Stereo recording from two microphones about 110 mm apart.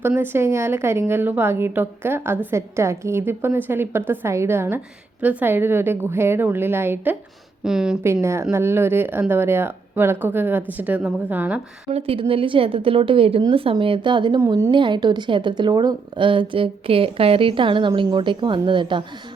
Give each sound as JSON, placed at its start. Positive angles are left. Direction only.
{"t": 0.2, "sound": "a woman's voice", "side_deg": -25}
{"t": 7.6, "sound": "a woman's voice", "side_deg": -5}
{"t": 8.0, "sound": "a woman's voice", "side_deg": -25}
{"t": 11.9, "sound": "a woman's voice", "side_deg": -60}
{"t": 14.3, "sound": "a woman's voice", "side_deg": -30}
{"t": 14.7, "sound": "a woman's voice", "side_deg": -45}